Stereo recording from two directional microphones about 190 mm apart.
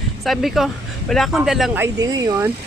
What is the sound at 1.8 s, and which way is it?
Speech, 20° right (ahead or behind).